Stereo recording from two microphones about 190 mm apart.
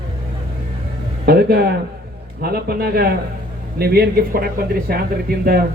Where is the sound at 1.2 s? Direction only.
55° right (ahead or behind).